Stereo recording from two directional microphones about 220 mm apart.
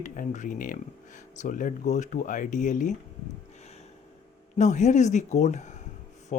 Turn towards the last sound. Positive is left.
turn(degrees=35)  # may be behind; listen again after turning